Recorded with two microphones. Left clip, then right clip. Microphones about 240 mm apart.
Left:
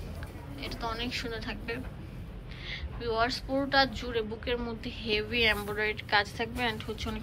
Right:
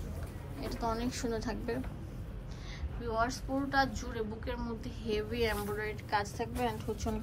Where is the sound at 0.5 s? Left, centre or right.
Right.